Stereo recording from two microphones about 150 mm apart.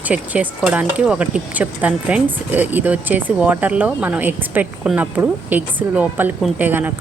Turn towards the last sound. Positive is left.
turn(degrees=-10)  # may be behind; listen again after turning